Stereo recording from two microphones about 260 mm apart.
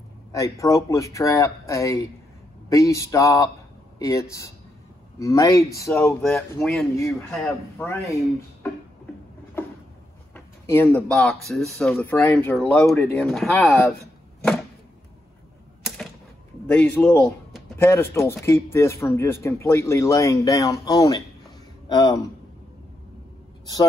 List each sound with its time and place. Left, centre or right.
0.3 s speech: centre
10.3 s speech: centre
16.6 s speech: centre